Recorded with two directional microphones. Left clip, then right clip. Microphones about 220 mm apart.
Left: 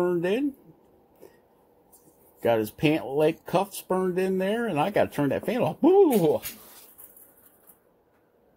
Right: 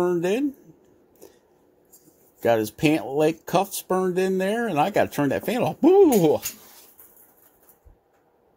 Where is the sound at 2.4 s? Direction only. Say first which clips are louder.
Right 3 dB; 15° right (ahead or behind).